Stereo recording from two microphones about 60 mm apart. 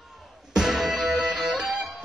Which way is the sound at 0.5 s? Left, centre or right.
Centre.